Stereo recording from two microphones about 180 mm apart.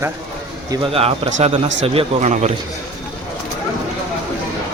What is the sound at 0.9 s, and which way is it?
Speech, 40° right (ahead or behind).